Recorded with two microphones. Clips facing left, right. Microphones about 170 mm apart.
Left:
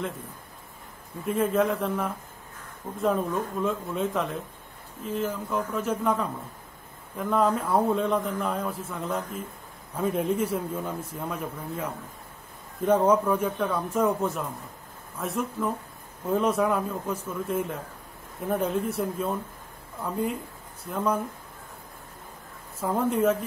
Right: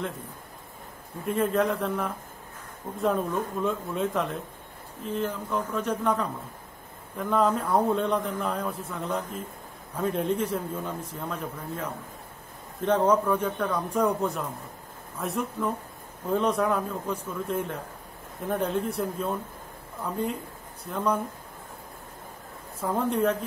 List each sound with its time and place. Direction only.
1.2 s a man's voice: centre (ahead or behind)
22.8 s a man's voice: 10° left (ahead or behind)